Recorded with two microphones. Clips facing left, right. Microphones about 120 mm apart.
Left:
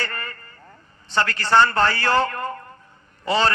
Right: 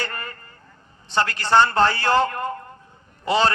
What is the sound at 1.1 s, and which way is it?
A man's voice, 20° right (ahead or behind).